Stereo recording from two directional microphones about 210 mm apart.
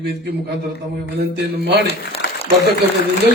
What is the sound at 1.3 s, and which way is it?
Speech, 50° right (ahead or behind).